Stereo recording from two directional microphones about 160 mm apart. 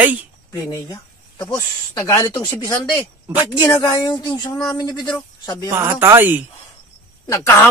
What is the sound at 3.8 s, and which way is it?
Speech, 25° left (ahead or behind).